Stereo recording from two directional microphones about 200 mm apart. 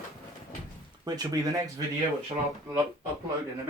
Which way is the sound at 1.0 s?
20° right (ahead or behind).